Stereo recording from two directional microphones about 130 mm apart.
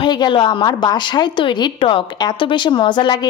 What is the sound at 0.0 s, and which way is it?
A woman's voice, 35° left (ahead or behind).